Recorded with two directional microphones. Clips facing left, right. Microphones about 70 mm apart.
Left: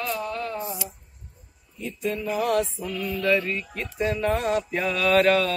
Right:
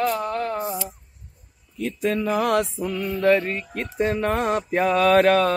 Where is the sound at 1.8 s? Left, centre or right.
Right.